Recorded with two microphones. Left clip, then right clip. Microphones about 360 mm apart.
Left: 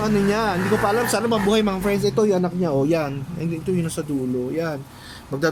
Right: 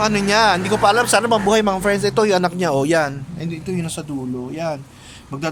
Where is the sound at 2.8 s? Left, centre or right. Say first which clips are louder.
Right 4 dB; centre.